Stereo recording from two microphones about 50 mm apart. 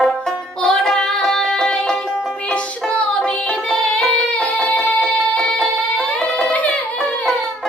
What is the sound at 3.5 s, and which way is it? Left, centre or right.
Music, centre.